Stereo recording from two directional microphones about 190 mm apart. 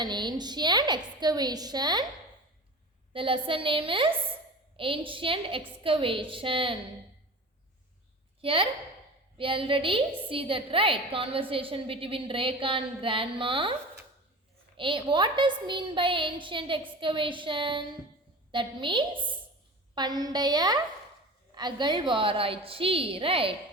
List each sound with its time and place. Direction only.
0.0 s a woman's voice: 25° right (ahead or behind)
3.1 s a woman's voice: 25° right (ahead or behind)
8.4 s a woman's voice: 30° right (ahead or behind)
14.8 s a woman's voice: 25° right (ahead or behind)